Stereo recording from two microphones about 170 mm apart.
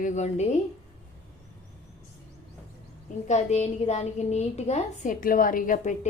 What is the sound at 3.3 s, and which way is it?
A woman's voice, 40° left (ahead or behind).